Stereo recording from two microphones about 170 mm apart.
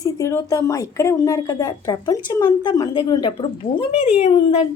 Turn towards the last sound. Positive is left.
turn(degrees=35)  # may be behind; listen again after turning